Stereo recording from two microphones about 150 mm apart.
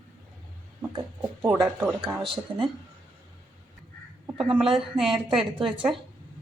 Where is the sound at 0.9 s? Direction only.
20° right (ahead or behind).